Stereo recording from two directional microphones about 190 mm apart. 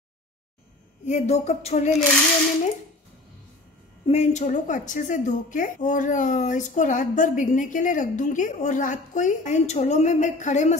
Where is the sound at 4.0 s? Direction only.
35° left (ahead or behind).